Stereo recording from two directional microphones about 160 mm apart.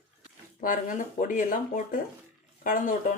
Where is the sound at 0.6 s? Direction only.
55° left (ahead or behind).